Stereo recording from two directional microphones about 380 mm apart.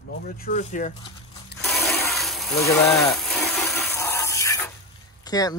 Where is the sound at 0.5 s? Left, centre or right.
Centre.